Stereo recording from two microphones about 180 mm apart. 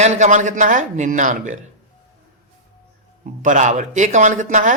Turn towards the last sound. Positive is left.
turn(degrees=-45)  # may be behind; listen again after turning